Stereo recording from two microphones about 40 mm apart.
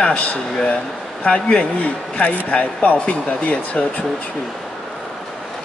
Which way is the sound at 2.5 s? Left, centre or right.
Left.